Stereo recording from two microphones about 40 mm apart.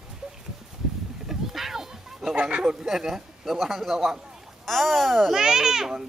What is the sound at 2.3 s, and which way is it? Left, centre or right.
Speech, right.